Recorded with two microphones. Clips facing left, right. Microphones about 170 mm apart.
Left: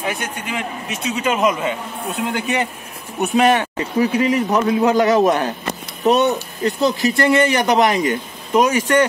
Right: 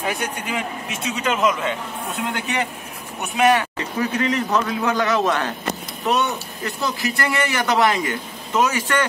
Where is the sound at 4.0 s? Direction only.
10° left (ahead or behind).